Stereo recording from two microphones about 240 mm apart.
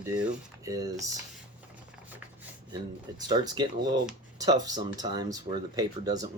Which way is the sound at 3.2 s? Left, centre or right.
Centre.